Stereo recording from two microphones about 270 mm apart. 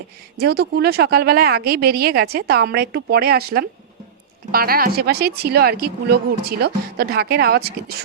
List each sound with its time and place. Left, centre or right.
0.3 s speech: right